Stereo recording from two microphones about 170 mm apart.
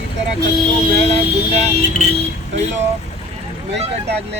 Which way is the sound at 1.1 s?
40° right (ahead or behind).